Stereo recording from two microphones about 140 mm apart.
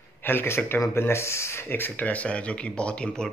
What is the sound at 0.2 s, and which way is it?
Speech, 15° left (ahead or behind).